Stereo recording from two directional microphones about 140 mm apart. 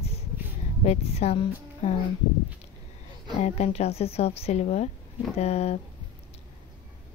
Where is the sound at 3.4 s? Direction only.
55° left (ahead or behind).